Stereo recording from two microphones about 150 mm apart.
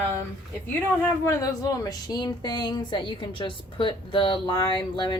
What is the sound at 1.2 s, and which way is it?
A woman's voice, 20° left (ahead or behind).